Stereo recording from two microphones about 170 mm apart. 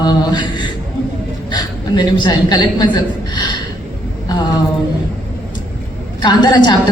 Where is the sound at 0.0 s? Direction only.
25° left (ahead or behind).